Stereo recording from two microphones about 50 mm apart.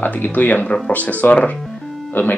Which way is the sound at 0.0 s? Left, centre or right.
Left.